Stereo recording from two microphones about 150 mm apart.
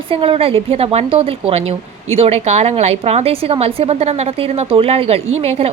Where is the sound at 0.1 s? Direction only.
40° right (ahead or behind).